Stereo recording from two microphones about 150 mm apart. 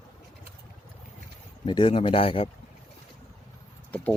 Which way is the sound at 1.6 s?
35° left (ahead or behind).